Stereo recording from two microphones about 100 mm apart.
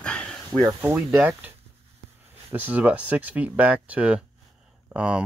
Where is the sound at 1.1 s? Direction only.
15° right (ahead or behind).